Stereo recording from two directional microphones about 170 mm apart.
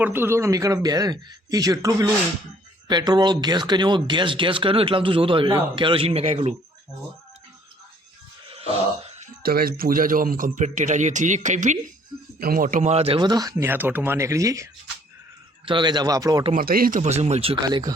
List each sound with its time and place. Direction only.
0.0 s speech: 15° right (ahead or behind); by 6.6 s 40° right (ahead or behind)
9.4 s speech: 60° right (ahead or behind); by 11.8 s 45° right (ahead or behind)
12.4 s speech: 55° right (ahead or behind); by 16.4 s 20° right (ahead or behind)
16.6 s speech: 60° right (ahead or behind)
17.0 s speech: 40° right (ahead or behind)
17.6 s speech: 25° right (ahead or behind)